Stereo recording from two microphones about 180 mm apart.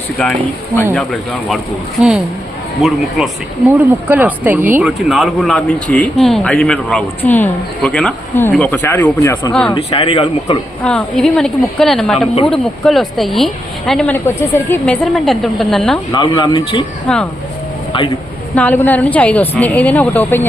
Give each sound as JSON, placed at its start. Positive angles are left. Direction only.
{"t": 0.9, "sound": "a woman's voice", "side_deg": 0}
{"t": 9.7, "sound": "speech", "side_deg": 30}
{"t": 10.8, "sound": "a woman's voice", "side_deg": 5}
{"t": 16.1, "sound": "speech", "side_deg": 25}
{"t": 17.1, "sound": "a woman's voice", "side_deg": 5}
{"t": 18.5, "sound": "speech", "side_deg": 10}